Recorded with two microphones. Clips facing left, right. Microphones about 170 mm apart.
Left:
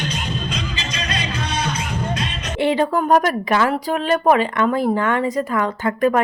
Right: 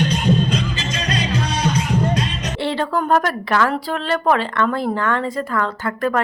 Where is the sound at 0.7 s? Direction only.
40° right (ahead or behind).